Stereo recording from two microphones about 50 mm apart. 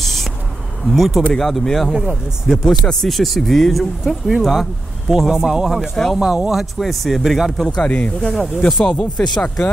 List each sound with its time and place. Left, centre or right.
0.0 s insect: centre
0.9 s speech: centre
1.9 s a man's voice: centre
2.5 s speech: centre
2.9 s a man's voice: centre
6.6 s speech: centre
7.6 s speech: centre
8.6 s speech: centre